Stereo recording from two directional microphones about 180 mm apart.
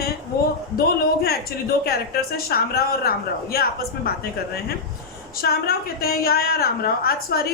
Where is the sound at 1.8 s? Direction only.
60° left (ahead or behind).